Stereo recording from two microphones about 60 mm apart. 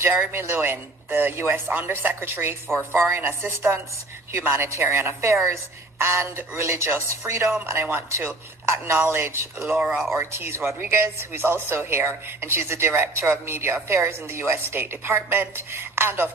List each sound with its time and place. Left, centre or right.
0.0 s speech: right
0.3 s a woman's voice: right
9.8 s speech: centre
10.2 s a woman's voice: right